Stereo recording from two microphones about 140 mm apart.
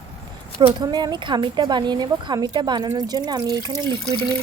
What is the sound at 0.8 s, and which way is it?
A woman's voice, 30° right (ahead or behind).